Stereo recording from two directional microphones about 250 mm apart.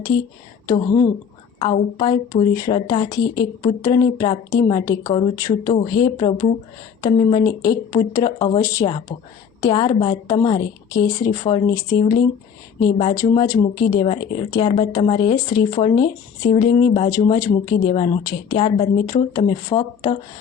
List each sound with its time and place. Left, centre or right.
1.5 s speech: centre